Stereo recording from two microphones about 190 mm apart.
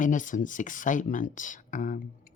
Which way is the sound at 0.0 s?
45° left (ahead or behind).